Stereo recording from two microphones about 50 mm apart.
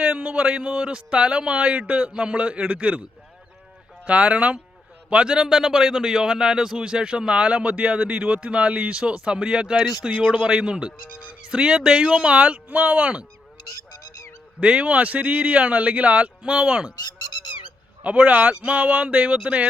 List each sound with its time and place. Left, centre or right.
0.0 s speech: right
4.0 s a man's voice: right
12.6 s speech: right
14.6 s speech: right
18.0 s speech: right